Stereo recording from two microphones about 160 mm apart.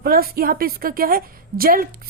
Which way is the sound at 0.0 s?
70° right (ahead or behind).